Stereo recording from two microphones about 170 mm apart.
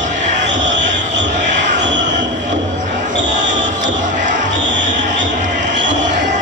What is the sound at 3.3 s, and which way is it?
Basketball bounce, 50° right (ahead or behind).